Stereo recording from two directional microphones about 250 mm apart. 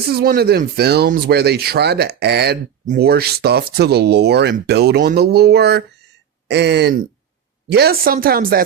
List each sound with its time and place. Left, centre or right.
0.1 s speech: right